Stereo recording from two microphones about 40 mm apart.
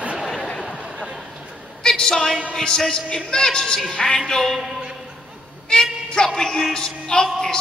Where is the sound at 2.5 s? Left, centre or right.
Centre.